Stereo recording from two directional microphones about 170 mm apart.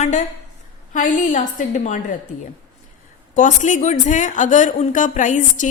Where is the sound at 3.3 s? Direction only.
45° left (ahead or behind).